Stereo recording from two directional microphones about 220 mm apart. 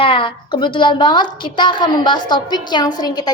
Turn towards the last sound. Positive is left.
turn(degrees=20)  # may be behind; listen again after turning